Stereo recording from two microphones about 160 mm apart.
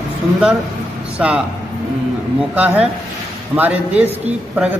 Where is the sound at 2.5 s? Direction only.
10° right (ahead or behind).